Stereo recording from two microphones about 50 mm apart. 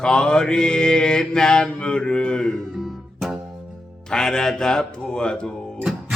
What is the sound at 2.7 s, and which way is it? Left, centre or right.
Music, centre.